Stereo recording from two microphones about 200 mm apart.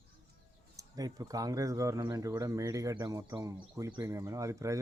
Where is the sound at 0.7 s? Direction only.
20° right (ahead or behind).